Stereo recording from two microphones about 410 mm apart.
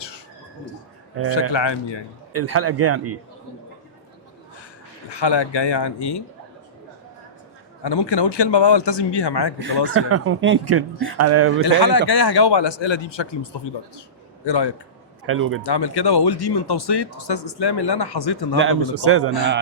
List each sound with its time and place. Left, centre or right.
1.3 s speech: left
2.3 s speech: right
5.0 s speech: left
7.9 s speech: left
9.6 s speech: right
11.6 s speech: left
15.3 s speech: right
15.6 s speech: left
18.5 s speech: right